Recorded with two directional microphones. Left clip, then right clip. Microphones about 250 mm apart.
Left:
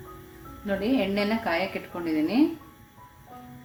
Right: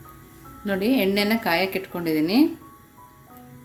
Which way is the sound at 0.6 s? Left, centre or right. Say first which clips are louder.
Right 4 dB; right.